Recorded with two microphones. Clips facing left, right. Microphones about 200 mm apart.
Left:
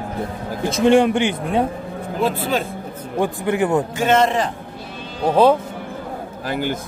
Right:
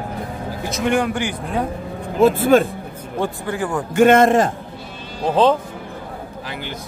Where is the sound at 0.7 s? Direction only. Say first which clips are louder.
Left 6 dB; 30° left (ahead or behind).